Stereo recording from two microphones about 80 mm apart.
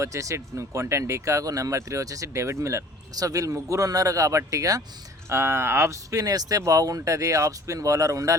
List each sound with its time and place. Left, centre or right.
0.0 s speech: right
5.3 s speech: right